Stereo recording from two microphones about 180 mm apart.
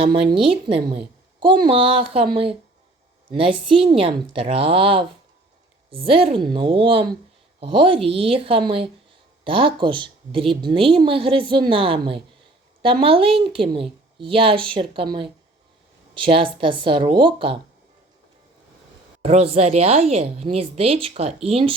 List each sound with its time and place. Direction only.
0.0 s a woman's voice: 30° right (ahead or behind)
19.2 s a woman's voice: 30° right (ahead or behind)